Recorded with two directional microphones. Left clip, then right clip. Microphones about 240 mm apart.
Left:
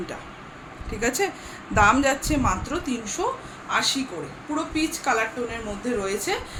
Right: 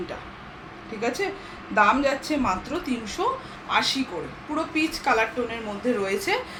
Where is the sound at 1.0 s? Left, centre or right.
Left.